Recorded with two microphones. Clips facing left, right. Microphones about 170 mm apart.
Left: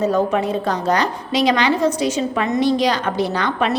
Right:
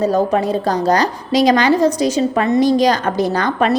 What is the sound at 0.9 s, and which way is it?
A woman's voice, 40° right (ahead or behind).